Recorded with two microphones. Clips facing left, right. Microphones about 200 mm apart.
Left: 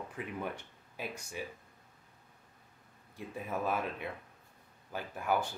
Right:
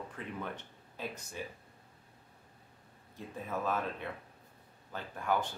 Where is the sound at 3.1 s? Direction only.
10° left (ahead or behind).